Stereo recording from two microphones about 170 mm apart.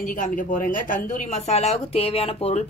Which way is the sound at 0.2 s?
50° left (ahead or behind).